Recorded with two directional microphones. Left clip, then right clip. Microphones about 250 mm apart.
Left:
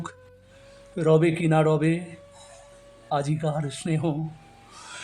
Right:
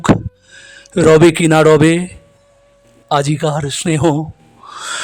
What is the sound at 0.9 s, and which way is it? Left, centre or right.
A man's voice, right.